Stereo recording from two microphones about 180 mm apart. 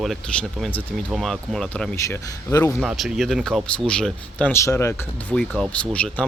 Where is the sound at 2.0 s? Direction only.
15° left (ahead or behind).